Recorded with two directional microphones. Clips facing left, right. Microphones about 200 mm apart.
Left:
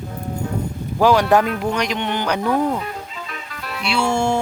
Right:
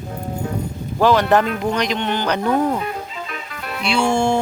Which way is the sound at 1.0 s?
10° left (ahead or behind).